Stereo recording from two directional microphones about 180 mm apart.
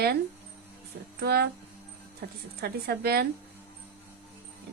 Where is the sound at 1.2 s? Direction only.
65° right (ahead or behind).